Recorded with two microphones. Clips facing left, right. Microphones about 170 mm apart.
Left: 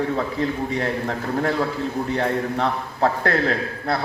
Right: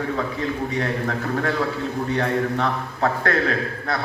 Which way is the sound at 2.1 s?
30° left (ahead or behind).